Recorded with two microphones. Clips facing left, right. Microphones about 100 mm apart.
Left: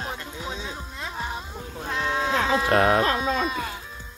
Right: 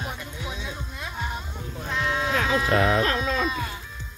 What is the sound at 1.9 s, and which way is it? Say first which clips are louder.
Speech: left 1 dB; 30° left (ahead or behind).